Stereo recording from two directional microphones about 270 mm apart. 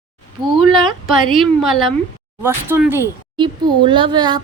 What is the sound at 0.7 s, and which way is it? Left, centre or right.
A woman's voice, centre.